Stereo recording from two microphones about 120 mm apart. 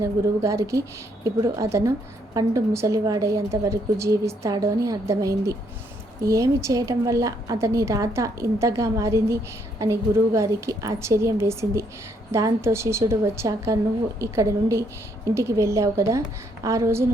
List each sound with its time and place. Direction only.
0.0 s a woman's voice: 25° right (ahead or behind)